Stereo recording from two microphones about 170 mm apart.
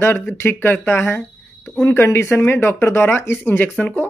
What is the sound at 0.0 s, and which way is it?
Speech, 10° left (ahead or behind).